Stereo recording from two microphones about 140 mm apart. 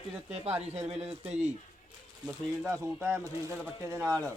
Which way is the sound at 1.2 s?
50° right (ahead or behind).